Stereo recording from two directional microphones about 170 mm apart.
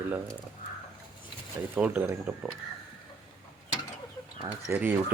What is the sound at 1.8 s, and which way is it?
Speech, 10° right (ahead or behind).